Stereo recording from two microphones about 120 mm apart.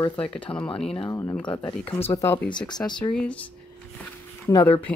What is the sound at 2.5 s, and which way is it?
Speech, 40° left (ahead or behind).